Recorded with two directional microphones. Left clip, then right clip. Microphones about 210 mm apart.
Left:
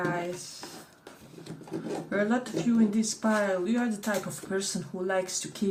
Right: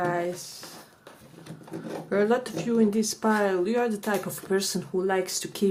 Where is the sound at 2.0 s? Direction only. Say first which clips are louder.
Right 6 dB; 55° right (ahead or behind).